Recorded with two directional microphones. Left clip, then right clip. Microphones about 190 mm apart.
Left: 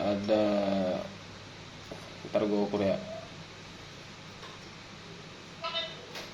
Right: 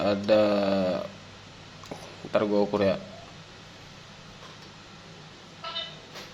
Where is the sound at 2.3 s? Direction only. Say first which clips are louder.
Right 5 dB; 35° right (ahead or behind).